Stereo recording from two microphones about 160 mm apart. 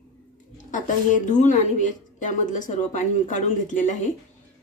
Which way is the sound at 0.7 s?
55° left (ahead or behind).